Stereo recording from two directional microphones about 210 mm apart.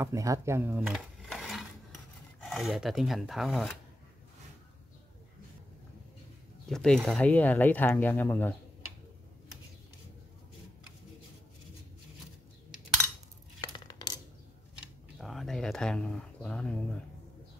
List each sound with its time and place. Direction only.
0.0 s speech: 15° right (ahead or behind)
6.7 s speech: centre (ahead or behind)
13.6 s coin: 20° left (ahead or behind)
15.1 s a sound: centre (ahead or behind)